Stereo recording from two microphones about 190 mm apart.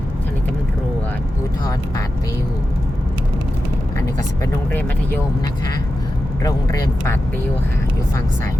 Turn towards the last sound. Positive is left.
turn(degrees=15)  # may be behind; listen again after turning